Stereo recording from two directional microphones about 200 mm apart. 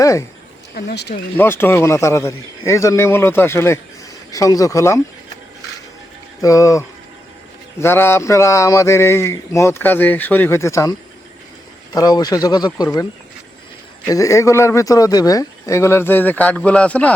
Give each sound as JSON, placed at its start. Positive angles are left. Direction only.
{"t": 0.0, "sound": "speech", "side_deg": 15}
{"t": 0.8, "sound": "speech", "side_deg": 55}
{"t": 1.4, "sound": "speech", "side_deg": 10}
{"t": 6.4, "sound": "speech", "side_deg": 15}
{"t": 11.9, "sound": "speech", "side_deg": 20}
{"t": 14.1, "sound": "speech", "side_deg": 15}